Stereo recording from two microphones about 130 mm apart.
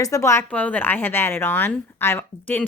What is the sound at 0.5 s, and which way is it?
Speech, 10° left (ahead or behind).